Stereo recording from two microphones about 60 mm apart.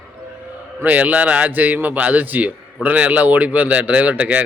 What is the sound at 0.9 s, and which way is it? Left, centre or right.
A man's voice, right.